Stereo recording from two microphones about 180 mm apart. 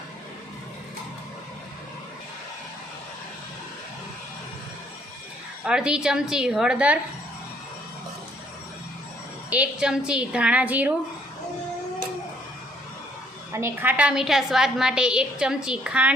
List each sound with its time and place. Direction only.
5.6 s a woman's voice: 5° right (ahead or behind)
9.5 s a woman's voice: 5° right (ahead or behind)
13.5 s a woman's voice: 15° right (ahead or behind)